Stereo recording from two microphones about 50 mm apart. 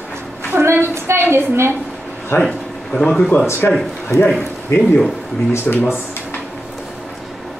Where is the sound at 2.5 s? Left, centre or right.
Centre.